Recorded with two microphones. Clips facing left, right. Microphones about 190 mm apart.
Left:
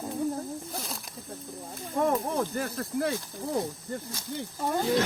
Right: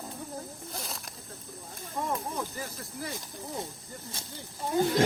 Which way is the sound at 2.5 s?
65° left (ahead or behind).